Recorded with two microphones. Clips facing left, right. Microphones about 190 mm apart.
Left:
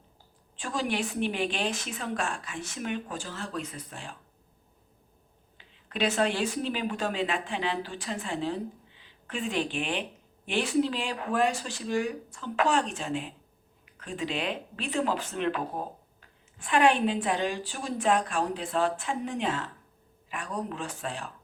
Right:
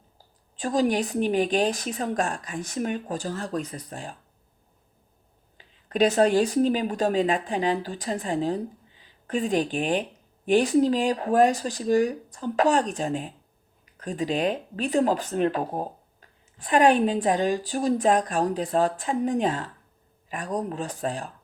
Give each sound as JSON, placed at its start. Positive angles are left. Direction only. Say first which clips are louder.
{"t": 0.5, "sound": "speech", "louder": "right 8 dB", "side_deg": -40}
{"t": 5.5, "sound": "speech", "louder": "right 8 dB", "side_deg": -40}